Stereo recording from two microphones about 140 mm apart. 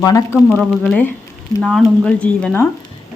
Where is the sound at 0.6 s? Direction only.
5° left (ahead or behind).